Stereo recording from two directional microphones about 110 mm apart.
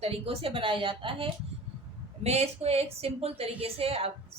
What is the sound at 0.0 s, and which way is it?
A woman's voice, 60° right (ahead or behind).